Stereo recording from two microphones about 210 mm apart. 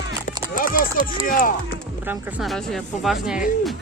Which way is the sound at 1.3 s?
40° left (ahead or behind).